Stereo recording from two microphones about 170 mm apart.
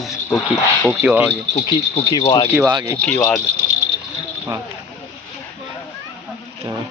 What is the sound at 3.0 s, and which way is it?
Speech, 10° left (ahead or behind).